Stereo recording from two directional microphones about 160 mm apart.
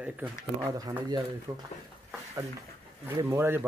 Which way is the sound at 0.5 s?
20° right (ahead or behind).